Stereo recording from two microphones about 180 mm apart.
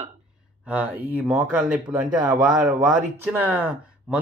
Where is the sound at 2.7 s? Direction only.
20° right (ahead or behind).